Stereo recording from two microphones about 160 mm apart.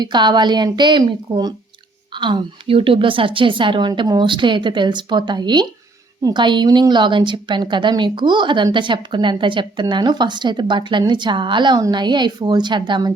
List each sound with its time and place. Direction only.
0.0 s a woman's voice: 30° right (ahead or behind)